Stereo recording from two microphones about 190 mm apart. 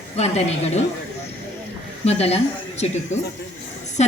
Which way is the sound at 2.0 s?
35° left (ahead or behind).